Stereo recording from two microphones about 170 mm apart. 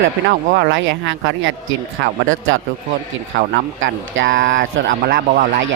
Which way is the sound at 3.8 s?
90° right.